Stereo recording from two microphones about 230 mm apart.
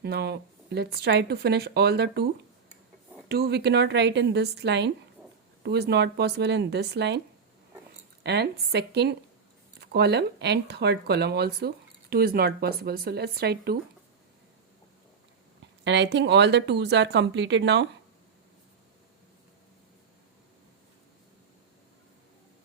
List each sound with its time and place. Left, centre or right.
0.0 s speech: right
3.2 s speech: right
8.2 s speech: right
15.8 s speech: right